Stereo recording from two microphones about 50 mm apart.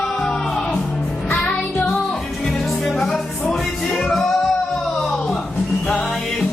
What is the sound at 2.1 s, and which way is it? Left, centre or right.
Music, centre.